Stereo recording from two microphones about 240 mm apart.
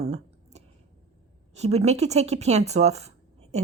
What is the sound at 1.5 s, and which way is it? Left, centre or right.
A woman's voice, right.